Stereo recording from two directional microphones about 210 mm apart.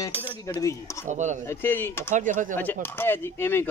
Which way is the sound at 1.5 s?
10° left (ahead or behind).